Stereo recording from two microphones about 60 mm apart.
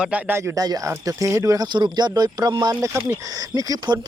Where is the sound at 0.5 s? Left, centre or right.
Right.